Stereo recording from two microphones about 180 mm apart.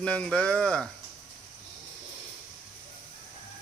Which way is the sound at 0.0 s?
5° left (ahead or behind).